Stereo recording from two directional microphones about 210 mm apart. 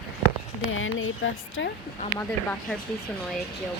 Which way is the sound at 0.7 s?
70° left (ahead or behind).